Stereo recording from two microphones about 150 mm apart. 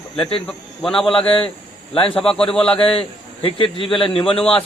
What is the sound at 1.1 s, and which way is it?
Speech, 40° left (ahead or behind).